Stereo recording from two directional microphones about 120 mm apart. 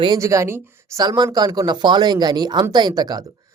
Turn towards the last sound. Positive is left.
turn(degrees=-35)  # may be behind; listen again after turning